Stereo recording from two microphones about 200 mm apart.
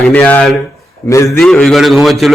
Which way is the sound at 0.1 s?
5° left (ahead or behind).